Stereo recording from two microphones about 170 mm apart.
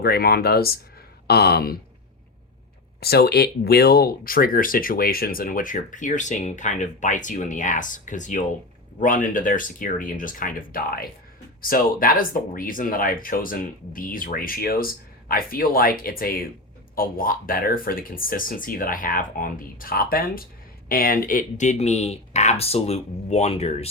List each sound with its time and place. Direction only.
0.0 s speech: 65° left (ahead or behind)
1.3 s a sound: 65° left (ahead or behind)
3.0 s speech: 70° left (ahead or behind); by 23.9 s 35° left (ahead or behind)